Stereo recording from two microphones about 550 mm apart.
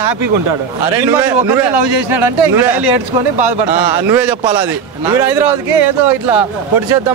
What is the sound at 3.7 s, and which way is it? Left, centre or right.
Speech, centre.